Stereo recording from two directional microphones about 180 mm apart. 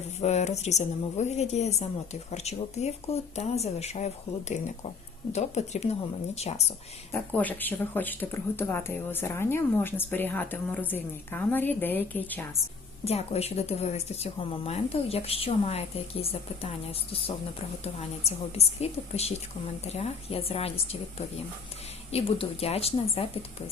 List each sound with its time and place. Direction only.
0.2 s a woman's voice: 40° left (ahead or behind)
7.1 s speech: 10° left (ahead or behind)
13.1 s a woman's voice: 35° left (ahead or behind)